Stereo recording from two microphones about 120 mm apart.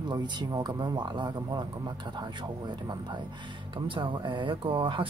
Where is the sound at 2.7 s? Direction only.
40° right (ahead or behind).